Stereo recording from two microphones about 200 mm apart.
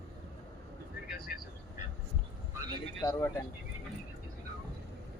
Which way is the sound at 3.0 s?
15° left (ahead or behind).